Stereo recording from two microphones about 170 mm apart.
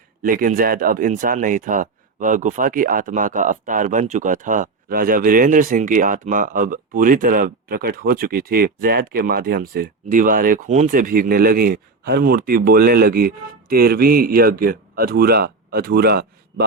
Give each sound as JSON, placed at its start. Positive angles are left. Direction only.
{"t": 0.2, "sound": "speech", "side_deg": -55}